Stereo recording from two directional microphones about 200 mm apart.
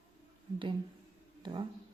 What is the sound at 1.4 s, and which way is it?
Speech, 20° right (ahead or behind).